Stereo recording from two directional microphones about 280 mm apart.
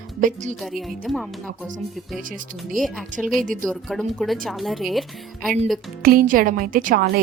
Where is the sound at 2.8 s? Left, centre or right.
Centre.